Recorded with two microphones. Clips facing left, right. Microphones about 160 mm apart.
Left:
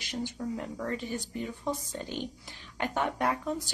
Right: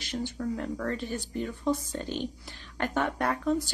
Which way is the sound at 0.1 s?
15° left (ahead or behind).